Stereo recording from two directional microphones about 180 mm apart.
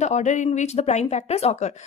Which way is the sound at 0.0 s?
40° left (ahead or behind).